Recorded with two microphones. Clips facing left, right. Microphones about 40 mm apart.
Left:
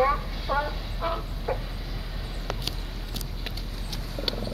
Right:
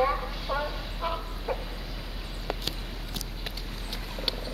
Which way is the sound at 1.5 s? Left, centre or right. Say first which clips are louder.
Left 2 dB; centre.